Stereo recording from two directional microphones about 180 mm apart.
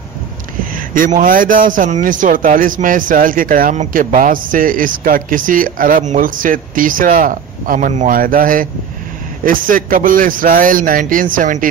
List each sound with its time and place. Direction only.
0.7 s a man's voice: 50° right (ahead or behind)